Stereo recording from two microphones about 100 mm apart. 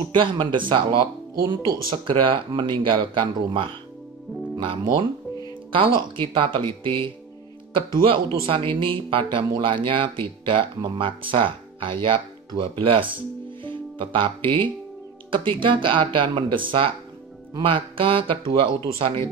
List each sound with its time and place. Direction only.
0.1 s a man's voice: 55° right (ahead or behind)
4.6 s speech: 50° right (ahead or behind)
5.7 s a man's voice: 60° right (ahead or behind)